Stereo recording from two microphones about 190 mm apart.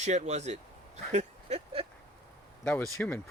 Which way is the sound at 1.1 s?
35° right (ahead or behind).